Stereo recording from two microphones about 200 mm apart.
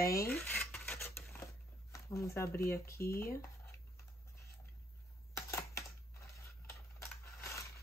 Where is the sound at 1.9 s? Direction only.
15° left (ahead or behind).